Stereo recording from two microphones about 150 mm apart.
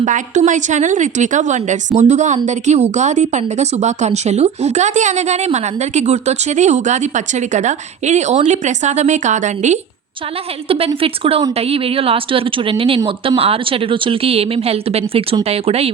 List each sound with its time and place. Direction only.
0.0 s a woman's voice: 55° right (ahead or behind)
10.7 s a woman's voice: 40° right (ahead or behind)